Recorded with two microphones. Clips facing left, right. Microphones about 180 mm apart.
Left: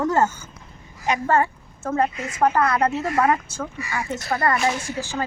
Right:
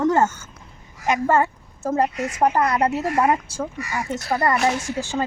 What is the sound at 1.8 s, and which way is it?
Speech, 15° right (ahead or behind).